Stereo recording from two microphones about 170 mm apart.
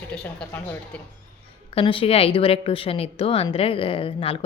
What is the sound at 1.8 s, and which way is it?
A woman's voice, 35° left (ahead or behind).